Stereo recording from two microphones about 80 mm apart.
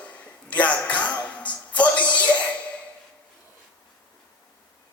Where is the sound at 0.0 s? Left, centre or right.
Centre.